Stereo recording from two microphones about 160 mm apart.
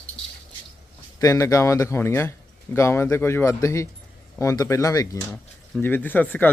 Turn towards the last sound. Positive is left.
turn(degrees=10)  # may be behind; listen again after turning